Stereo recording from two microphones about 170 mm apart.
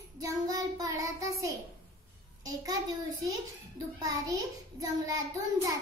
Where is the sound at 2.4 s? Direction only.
20° right (ahead or behind).